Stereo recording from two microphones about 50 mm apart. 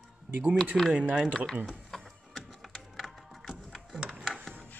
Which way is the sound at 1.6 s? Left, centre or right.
Centre.